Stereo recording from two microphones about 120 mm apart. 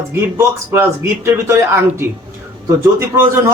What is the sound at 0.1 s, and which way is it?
A man's voice, 20° right (ahead or behind).